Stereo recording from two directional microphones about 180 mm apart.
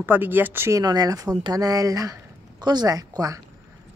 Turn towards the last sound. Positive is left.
turn(degrees=-20)  # may be behind; listen again after turning